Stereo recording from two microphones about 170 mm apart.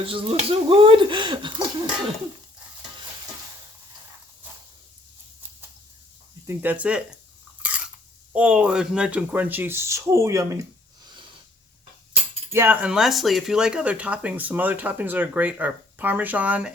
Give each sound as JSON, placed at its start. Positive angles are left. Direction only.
{"t": 0.0, "sound": "speech", "side_deg": -30}
{"t": 6.5, "sound": "speech", "side_deg": -10}
{"t": 7.6, "sound": "biting", "side_deg": -10}
{"t": 8.3, "sound": "speech", "side_deg": -5}
{"t": 12.5, "sound": "speech", "side_deg": -15}